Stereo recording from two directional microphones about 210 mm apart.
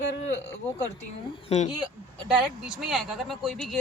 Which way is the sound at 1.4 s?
30° left (ahead or behind).